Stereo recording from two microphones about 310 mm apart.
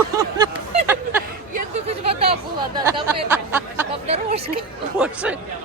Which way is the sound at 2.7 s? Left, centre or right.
Centre.